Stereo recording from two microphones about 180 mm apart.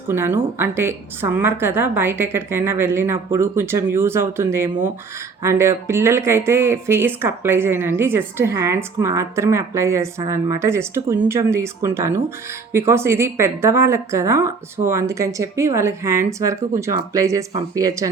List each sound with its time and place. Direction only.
0.1 s speech: 15° right (ahead or behind)